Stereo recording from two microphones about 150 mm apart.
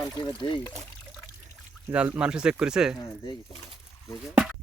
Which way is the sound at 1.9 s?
10° right (ahead or behind).